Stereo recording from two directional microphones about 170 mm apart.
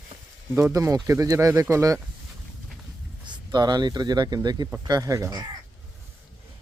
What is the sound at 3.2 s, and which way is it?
Speech, 25° right (ahead or behind).